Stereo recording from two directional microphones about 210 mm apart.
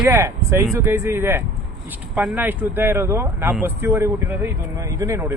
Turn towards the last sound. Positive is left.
turn(degrees=-10)  # may be behind; listen again after turning